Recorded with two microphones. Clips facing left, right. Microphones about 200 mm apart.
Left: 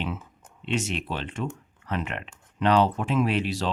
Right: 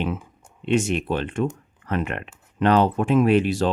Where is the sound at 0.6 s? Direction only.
50° right (ahead or behind).